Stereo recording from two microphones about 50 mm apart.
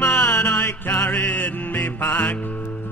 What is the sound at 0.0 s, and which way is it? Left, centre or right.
Music, left.